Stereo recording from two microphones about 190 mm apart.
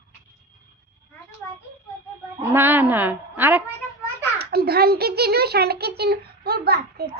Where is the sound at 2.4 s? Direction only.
10° right (ahead or behind).